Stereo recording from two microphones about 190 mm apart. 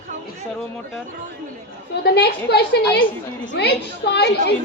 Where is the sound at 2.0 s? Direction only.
60° left (ahead or behind).